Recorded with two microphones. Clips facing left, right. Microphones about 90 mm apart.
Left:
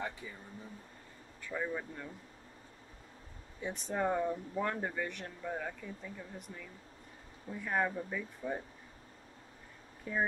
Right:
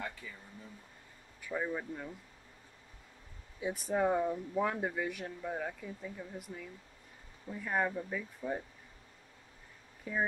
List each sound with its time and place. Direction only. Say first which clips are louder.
0.0 s a sound: left 2 dB; 20° left (ahead or behind)
1.4 s speech: right 1 dB; 10° right (ahead or behind)
3.6 s speech: right 3 dB; 5° right (ahead or behind)
10.1 s speech: even; centre (ahead or behind)